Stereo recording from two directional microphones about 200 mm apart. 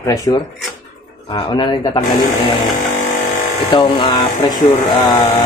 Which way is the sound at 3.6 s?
20° left (ahead or behind).